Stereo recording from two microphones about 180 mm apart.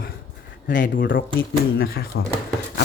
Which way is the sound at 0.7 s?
50° left (ahead or behind).